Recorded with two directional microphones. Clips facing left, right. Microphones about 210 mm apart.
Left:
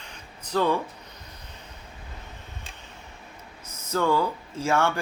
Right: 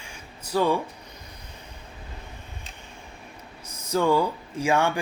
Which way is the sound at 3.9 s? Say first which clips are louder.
Right 2 dB; 15° right (ahead or behind).